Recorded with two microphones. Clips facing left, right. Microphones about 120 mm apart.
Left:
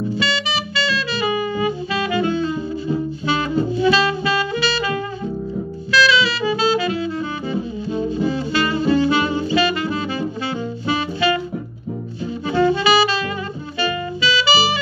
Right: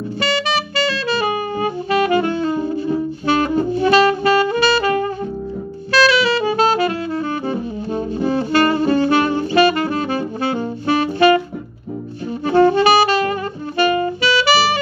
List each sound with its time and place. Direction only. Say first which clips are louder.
0.2 s saxophone: right 3 dB; 55° right (ahead or behind)
12.4 s saxophone: right 4 dB; 55° right (ahead or behind)
13.7 s music: right 6 dB; 50° right (ahead or behind)